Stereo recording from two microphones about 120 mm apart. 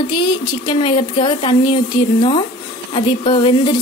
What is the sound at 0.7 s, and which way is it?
Speech, 45° left (ahead or behind).